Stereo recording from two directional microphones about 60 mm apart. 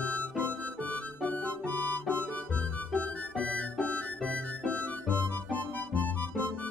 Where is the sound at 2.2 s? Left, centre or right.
Left.